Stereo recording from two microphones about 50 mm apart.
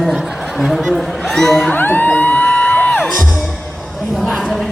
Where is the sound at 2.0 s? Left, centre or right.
Left.